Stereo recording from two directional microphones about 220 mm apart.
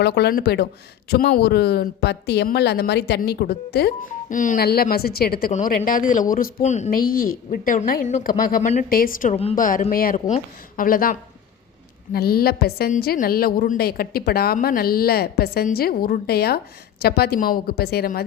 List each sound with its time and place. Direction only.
0.0 s a woman's voice: 45° left (ahead or behind)